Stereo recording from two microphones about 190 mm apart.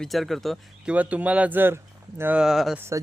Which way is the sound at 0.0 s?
Centre (ahead or behind).